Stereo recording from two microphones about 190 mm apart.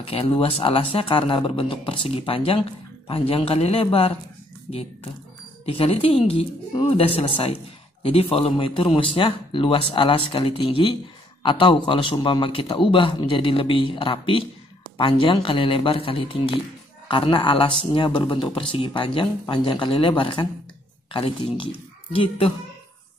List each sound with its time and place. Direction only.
0.0 s speech: 30° left (ahead or behind)
5.7 s speech: 30° left (ahead or behind)